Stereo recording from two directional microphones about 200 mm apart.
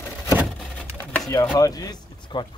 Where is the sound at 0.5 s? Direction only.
5° left (ahead or behind).